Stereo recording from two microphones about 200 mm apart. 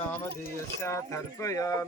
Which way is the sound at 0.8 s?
15° left (ahead or behind).